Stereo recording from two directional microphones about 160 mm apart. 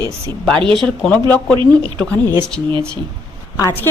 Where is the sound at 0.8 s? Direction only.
5° left (ahead or behind).